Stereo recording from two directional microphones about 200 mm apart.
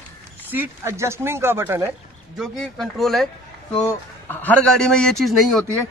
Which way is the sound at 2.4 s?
Centre (ahead or behind).